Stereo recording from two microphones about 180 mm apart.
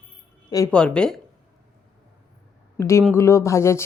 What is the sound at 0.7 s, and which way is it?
Speech, 5° left (ahead or behind).